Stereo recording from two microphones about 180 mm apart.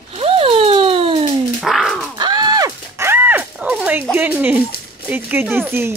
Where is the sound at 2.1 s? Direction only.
25° right (ahead or behind).